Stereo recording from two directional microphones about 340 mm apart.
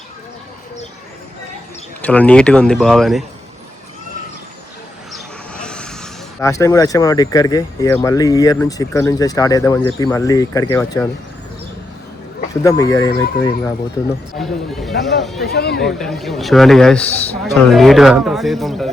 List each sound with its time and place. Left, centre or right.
2.0 s a man's voice: centre
5.1 s vehicle: centre
6.4 s speech: centre
12.6 s speech: centre
14.3 s a man's voice: centre
15.4 s speech: left
15.8 s a man's voice: centre